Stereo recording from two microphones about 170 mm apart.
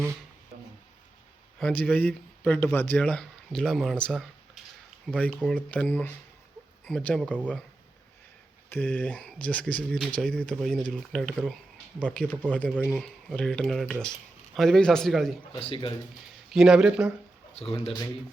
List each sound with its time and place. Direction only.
1.5 s speech: 5° left (ahead or behind)
8.7 s speech: 10° left (ahead or behind)
15.5 s speech: 30° left (ahead or behind)
16.5 s speech: 5° right (ahead or behind)
17.6 s speech: 35° left (ahead or behind)